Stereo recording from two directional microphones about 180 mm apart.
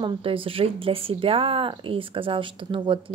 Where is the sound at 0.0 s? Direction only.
30° right (ahead or behind).